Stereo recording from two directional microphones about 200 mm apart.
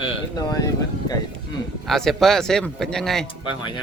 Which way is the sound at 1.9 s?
Centre (ahead or behind).